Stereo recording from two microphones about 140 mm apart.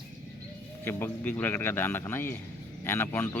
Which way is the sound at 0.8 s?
15° left (ahead or behind).